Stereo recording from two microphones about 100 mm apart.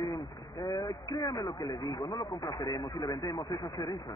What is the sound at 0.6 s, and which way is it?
A man's voice, 40° left (ahead or behind).